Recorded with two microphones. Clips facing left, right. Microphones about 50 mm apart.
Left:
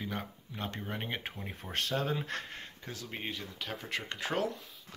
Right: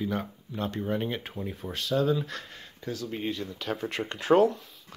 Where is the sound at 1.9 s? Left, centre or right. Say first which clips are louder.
Right 9 dB; left.